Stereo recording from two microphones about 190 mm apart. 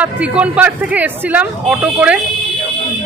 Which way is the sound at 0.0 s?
5° right (ahead or behind).